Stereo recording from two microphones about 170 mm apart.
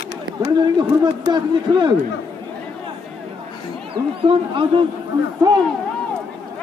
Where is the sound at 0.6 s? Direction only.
25° right (ahead or behind).